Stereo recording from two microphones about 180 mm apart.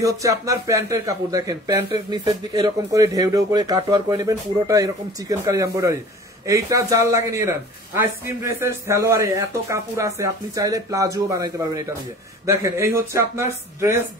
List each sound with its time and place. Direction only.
0.0 s speech: 20° right (ahead or behind)